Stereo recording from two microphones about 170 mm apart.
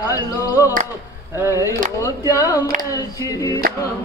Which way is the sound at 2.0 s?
20° left (ahead or behind).